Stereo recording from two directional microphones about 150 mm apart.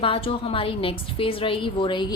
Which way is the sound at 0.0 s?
35° left (ahead or behind).